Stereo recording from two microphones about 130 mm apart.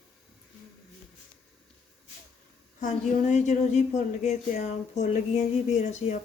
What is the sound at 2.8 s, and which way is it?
A woman's voice, 70° left (ahead or behind).